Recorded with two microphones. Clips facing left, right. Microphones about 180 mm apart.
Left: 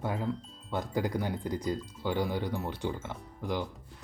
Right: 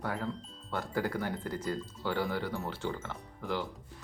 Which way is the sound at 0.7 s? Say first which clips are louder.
Left 2 dB; 15° left (ahead or behind).